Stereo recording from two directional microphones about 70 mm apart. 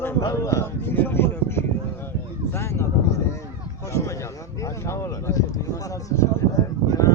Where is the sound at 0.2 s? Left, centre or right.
Left.